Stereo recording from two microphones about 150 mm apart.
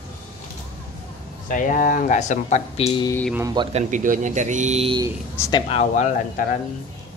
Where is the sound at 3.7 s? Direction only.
60° right (ahead or behind).